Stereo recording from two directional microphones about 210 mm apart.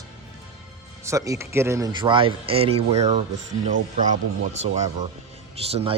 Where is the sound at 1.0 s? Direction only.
15° right (ahead or behind); by 3.1 s 30° right (ahead or behind).